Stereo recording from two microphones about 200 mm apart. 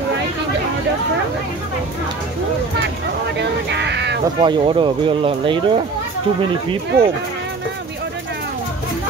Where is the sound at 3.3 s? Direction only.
60° right (ahead or behind).